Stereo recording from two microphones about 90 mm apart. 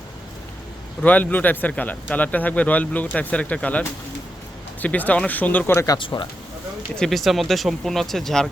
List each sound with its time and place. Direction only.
1.0 s speech: 15° left (ahead or behind)
6.0 s speech: 70° left (ahead or behind)
6.9 s speech: 5° left (ahead or behind)